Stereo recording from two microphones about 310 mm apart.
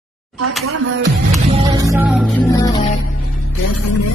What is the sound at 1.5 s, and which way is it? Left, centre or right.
Music, centre.